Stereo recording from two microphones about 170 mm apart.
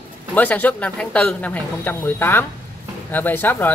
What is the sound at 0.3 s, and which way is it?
Speech, 10° left (ahead or behind).